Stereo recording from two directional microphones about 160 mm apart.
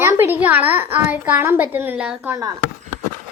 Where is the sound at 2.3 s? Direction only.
20° right (ahead or behind).